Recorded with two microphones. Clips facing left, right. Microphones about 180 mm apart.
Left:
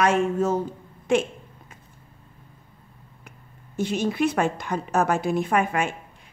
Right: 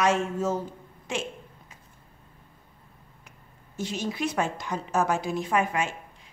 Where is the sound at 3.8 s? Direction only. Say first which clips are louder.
Left 7 dB; 55° left (ahead or behind).